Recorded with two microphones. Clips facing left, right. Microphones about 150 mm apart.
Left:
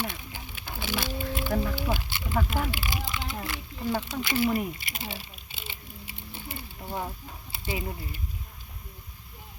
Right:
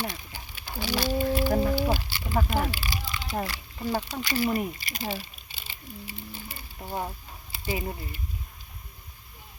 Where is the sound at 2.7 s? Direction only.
20° left (ahead or behind).